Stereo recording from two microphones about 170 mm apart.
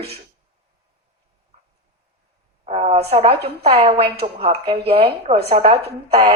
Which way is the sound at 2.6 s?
40° right (ahead or behind).